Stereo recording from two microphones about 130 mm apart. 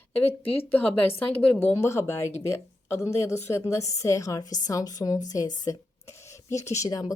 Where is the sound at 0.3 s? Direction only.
50° left (ahead or behind).